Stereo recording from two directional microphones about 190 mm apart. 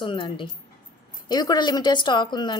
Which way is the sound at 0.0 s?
25° left (ahead or behind).